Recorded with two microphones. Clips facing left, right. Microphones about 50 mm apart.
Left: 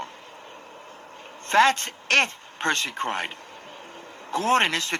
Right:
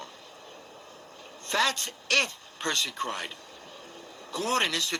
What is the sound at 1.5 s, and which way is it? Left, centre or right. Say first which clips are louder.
Speech: left 8 dB; left.